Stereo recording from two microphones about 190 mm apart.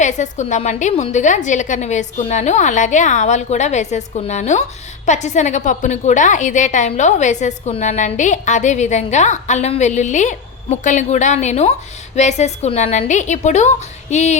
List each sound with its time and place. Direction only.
0.0 s a woman's voice: 40° left (ahead or behind)